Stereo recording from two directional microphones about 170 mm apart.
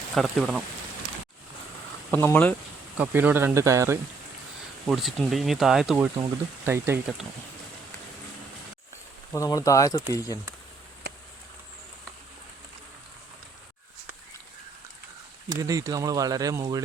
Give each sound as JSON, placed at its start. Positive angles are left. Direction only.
{"t": 0.1, "sound": "speech", "side_deg": 0}
{"t": 2.0, "sound": "speech", "side_deg": 15}
{"t": 3.0, "sound": "speech", "side_deg": -10}
{"t": 4.9, "sound": "speech", "side_deg": 0}
{"t": 6.1, "sound": "speech", "side_deg": -15}
{"t": 9.3, "sound": "speech", "side_deg": 20}
{"t": 15.4, "sound": "speech", "side_deg": -20}